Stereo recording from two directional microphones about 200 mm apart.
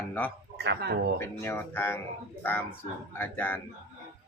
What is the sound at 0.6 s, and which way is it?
Speech, 55° right (ahead or behind).